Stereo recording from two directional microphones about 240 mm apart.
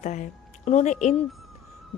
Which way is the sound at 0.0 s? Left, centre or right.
Left.